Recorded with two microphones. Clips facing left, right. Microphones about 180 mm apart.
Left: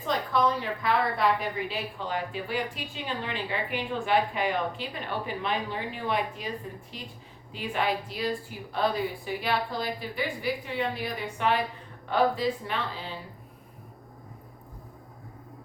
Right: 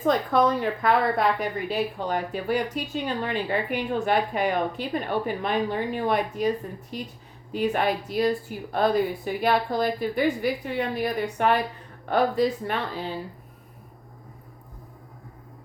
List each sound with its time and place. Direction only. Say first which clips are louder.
0.0 s a woman's voice: right 5 dB; 50° right (ahead or behind)